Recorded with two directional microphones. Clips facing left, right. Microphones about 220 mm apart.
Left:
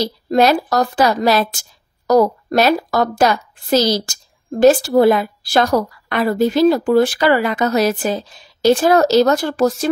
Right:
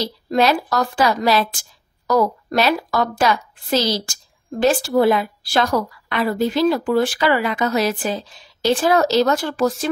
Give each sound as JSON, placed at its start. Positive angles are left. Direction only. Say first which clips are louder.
{"t": 0.0, "sound": "a woman's voice", "louder": "left 4 dB", "side_deg": 40}